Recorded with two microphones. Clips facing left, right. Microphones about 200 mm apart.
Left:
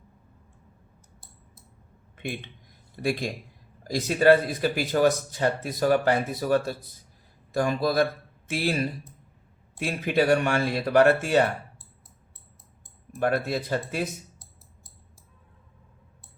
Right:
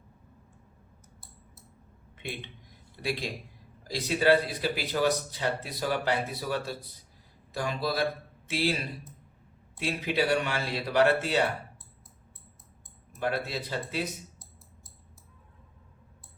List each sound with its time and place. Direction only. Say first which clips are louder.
2.9 s a man's voice: left 5 dB; 45° left (ahead or behind)
13.1 s speech: left 6 dB; 50° left (ahead or behind)